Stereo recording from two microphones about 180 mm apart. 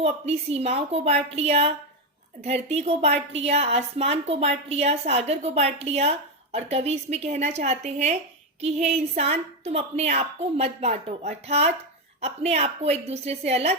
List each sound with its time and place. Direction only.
0.0 s a woman's voice: 35° right (ahead or behind)